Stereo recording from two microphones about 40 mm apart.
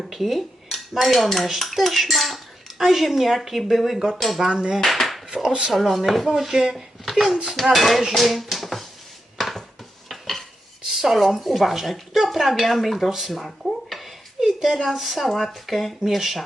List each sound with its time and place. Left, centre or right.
0.0 s dishes: centre
1.5 s cutlery: centre
4.4 s dishes: centre
4.9 s a sound: centre
5.4 s speech: centre
5.7 s cutlery: centre
6.3 s dishes: centre
7.1 s a child's voice: centre
7.6 s cutlery: centre
8.1 s speech: centre
10.1 s dishes: centre
10.9 s cutlery: centre
13.9 s speech: centre
16.0 s cutlery: centre